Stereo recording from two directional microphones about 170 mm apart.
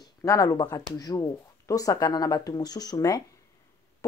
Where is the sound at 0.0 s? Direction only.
20° left (ahead or behind).